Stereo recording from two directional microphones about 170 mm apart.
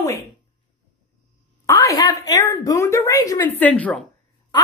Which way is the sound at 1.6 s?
20° left (ahead or behind).